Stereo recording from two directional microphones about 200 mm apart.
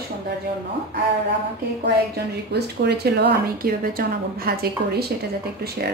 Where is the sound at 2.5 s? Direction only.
55° right (ahead or behind).